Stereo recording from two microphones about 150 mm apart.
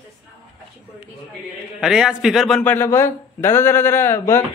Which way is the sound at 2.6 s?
15° left (ahead or behind).